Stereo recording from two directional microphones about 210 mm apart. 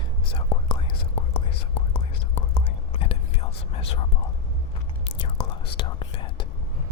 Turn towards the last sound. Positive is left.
turn(degrees=25)  # may be behind; listen again after turning